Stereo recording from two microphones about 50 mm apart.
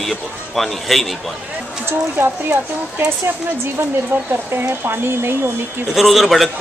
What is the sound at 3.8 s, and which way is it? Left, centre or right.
Speech, right.